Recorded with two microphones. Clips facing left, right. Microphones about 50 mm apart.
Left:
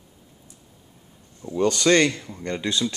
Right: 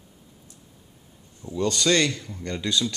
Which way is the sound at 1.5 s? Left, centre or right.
Left.